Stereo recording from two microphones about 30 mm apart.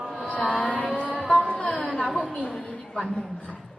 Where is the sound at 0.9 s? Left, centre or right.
Left.